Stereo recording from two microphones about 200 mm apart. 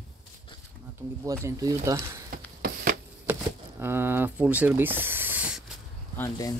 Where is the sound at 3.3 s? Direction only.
10° right (ahead or behind).